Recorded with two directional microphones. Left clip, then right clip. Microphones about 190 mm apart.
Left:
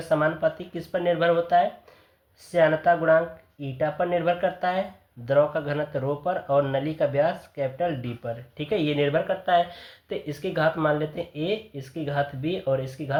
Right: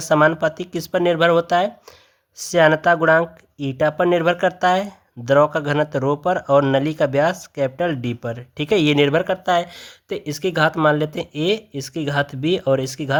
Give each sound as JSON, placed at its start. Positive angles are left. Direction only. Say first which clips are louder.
{"t": 0.1, "sound": "speech", "louder": "right 7 dB", "side_deg": -55}